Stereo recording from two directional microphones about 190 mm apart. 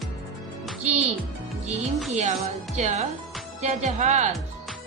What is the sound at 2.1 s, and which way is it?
Speech, 35° right (ahead or behind).